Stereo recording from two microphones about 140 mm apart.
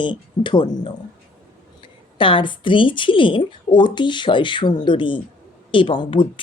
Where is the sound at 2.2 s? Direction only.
35° left (ahead or behind).